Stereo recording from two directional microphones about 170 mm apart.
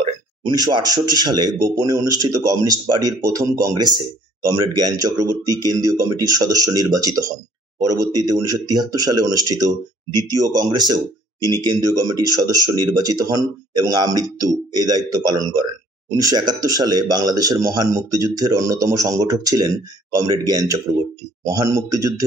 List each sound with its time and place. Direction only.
0.4 s speech: 25° right (ahead or behind)